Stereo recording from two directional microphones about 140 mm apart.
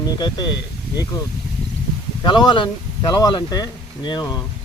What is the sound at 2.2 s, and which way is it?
Speech, 35° left (ahead or behind).